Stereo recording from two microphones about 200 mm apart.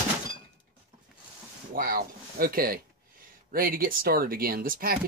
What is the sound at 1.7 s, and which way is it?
Speech, 45° right (ahead or behind).